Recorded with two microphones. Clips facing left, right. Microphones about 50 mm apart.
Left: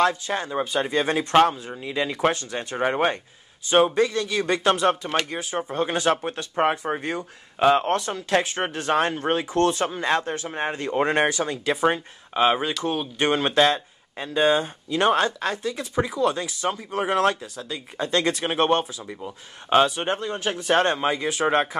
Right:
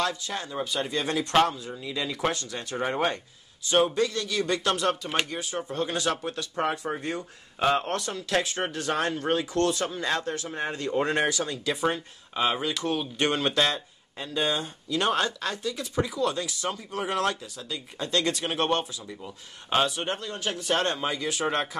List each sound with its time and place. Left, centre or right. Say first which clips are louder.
0.0 s speech: left 7 dB; left
3.6 s speech: left 4 dB; left